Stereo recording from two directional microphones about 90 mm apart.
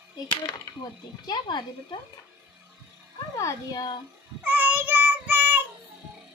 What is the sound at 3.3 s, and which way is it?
Speech, 35° left (ahead or behind).